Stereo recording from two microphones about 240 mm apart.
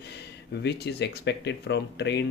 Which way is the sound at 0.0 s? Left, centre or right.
Left.